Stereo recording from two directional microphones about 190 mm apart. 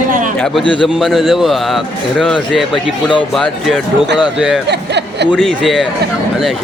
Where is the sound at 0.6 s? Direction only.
25° left (ahead or behind).